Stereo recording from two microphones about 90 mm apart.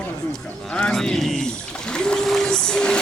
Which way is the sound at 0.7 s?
5° left (ahead or behind).